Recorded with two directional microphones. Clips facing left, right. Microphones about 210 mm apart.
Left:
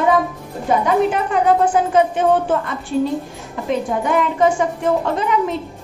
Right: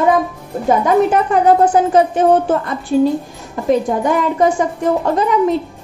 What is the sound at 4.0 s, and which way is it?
Speech, 40° right (ahead or behind).